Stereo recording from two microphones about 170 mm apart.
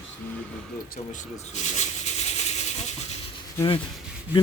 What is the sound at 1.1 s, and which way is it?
Speech, 45° left (ahead or behind).